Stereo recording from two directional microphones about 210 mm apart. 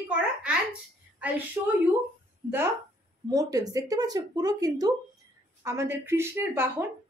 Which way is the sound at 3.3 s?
15° right (ahead or behind).